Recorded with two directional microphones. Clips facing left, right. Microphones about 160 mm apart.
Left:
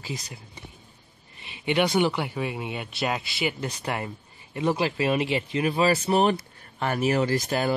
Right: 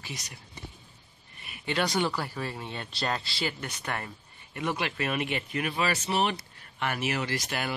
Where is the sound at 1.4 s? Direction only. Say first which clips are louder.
Left 6 dB; 20° left (ahead or behind).